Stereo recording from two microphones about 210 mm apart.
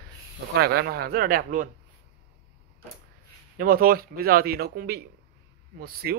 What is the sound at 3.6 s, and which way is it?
Speech, 45° right (ahead or behind).